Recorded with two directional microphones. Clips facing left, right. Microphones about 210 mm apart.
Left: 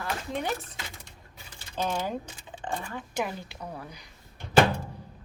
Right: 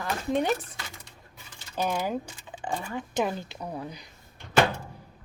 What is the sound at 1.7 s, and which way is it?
Speech, 10° right (ahead or behind).